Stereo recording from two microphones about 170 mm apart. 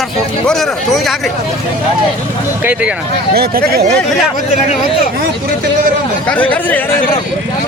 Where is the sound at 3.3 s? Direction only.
65° right (ahead or behind).